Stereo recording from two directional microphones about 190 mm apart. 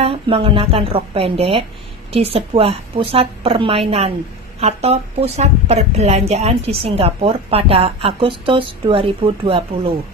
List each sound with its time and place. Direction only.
0.0 s a woman's voice: 30° right (ahead or behind)